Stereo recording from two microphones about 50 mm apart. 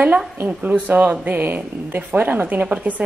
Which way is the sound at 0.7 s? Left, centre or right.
Right.